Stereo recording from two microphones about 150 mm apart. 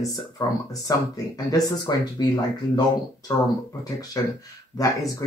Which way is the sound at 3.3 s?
30° left (ahead or behind).